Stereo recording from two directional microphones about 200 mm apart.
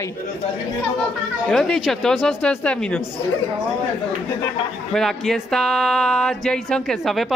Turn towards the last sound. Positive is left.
turn(degrees=0)  # may be behind; listen again after turning